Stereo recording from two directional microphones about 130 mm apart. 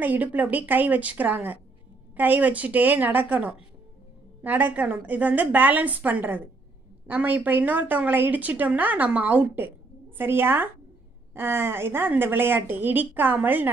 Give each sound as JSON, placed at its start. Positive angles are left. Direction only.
{"t": 0.0, "sound": "a woman's voice", "side_deg": -15}